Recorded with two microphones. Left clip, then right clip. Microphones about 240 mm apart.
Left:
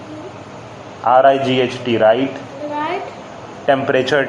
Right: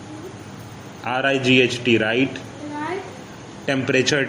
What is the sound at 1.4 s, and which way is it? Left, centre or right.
Speech, right.